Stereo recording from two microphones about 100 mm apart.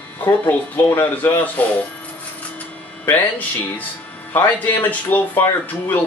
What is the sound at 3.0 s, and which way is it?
Speech, 15° left (ahead or behind).